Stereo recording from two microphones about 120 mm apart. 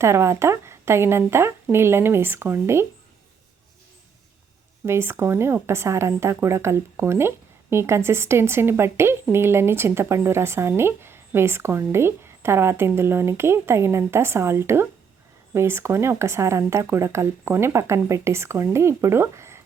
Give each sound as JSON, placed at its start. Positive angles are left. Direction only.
{"t": 0.0, "sound": "speech", "side_deg": -20}
{"t": 4.9, "sound": "speech", "side_deg": -20}